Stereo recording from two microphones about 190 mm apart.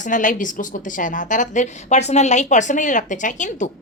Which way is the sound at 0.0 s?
40° left (ahead or behind).